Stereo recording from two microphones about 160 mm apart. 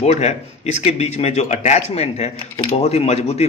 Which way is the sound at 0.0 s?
45° left (ahead or behind).